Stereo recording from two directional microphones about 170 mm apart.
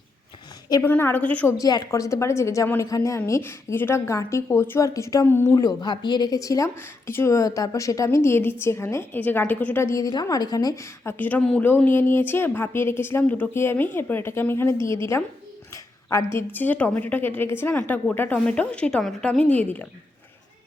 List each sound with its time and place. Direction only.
0.7 s a woman's voice: 15° left (ahead or behind)
1.5 s a woman's voice: 20° left (ahead or behind)